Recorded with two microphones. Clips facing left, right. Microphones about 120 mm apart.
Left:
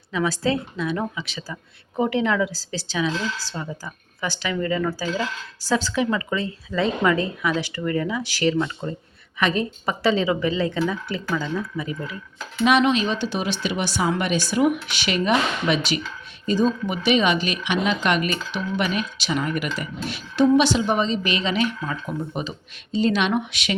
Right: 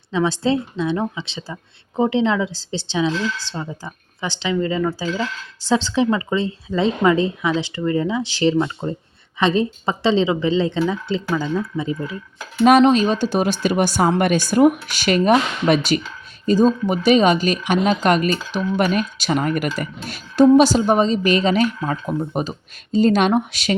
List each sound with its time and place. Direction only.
0.1 s a woman's voice: 25° right (ahead or behind)
12.6 s speech: 40° right (ahead or behind)